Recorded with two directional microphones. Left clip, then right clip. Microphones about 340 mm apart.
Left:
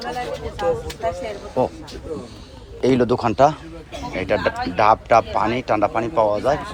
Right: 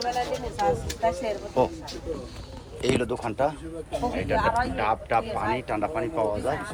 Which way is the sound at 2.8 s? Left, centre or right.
Left.